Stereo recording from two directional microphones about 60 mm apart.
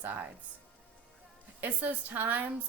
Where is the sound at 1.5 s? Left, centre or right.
Right.